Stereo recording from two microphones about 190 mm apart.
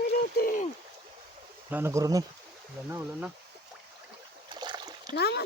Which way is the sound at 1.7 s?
15° right (ahead or behind).